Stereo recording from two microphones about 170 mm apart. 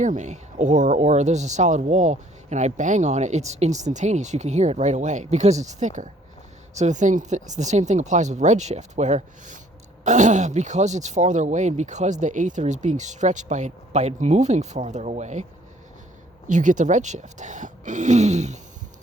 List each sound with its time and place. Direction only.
0.0 s speech: 45° right (ahead or behind)
16.5 s speech: 45° right (ahead or behind)